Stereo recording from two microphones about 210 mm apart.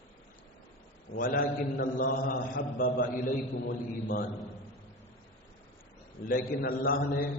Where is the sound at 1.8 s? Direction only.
40° left (ahead or behind).